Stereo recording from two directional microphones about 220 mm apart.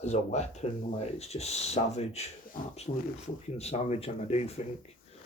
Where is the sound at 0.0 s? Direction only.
30° left (ahead or behind).